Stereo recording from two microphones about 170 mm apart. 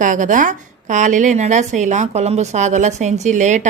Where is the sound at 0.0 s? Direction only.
50° right (ahead or behind).